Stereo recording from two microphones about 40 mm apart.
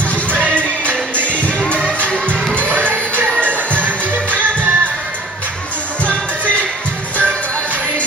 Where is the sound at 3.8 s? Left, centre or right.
Right.